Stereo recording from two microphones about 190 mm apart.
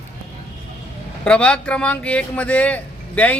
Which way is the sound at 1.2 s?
5° left (ahead or behind).